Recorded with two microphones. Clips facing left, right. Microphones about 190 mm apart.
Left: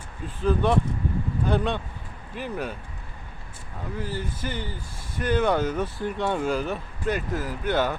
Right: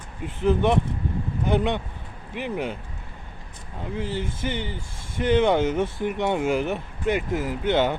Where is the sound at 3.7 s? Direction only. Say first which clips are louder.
Right 3 dB; 25° right (ahead or behind).